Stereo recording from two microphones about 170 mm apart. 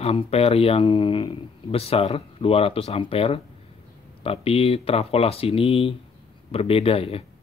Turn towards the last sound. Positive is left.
turn(degrees=35)  # may be behind; listen again after turning